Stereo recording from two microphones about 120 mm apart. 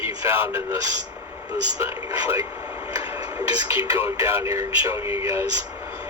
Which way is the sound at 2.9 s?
30° right (ahead or behind).